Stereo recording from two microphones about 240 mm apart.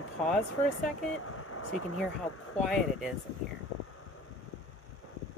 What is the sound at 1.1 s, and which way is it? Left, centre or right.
Speech, left.